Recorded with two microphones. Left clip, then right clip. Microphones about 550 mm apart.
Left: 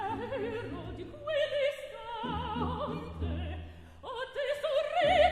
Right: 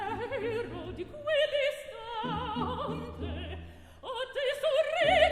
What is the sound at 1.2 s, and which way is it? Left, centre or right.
Opera, right.